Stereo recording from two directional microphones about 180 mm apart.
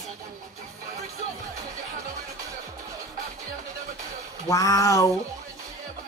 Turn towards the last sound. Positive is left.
turn(degrees=20)  # may be behind; listen again after turning